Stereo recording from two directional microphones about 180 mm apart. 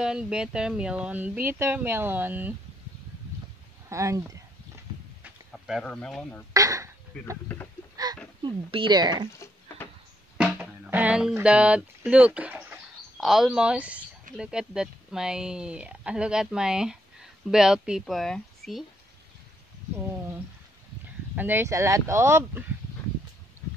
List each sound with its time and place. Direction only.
0.0 s speech: 5° right (ahead or behind)
3.9 s speech: 15° right (ahead or behind)
5.5 s speech: centre (ahead or behind)
6.5 s speech: 20° right (ahead or behind)
8.0 s a sound: 20° right (ahead or behind)
8.4 s speech: 25° right (ahead or behind)
10.3 s speech: 5° right (ahead or behind)
21.4 s speech: 10° right (ahead or behind)